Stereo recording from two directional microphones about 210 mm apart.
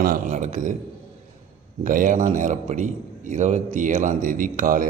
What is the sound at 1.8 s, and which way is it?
A man's voice, 40° right (ahead or behind).